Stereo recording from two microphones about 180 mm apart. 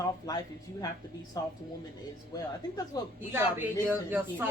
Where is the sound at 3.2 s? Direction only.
10° right (ahead or behind).